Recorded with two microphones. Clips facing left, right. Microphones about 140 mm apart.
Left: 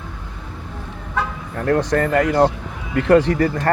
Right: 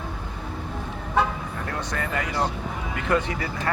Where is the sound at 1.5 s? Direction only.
55° left (ahead or behind).